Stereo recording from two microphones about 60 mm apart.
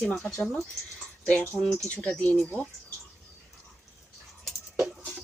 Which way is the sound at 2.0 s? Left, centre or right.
Left.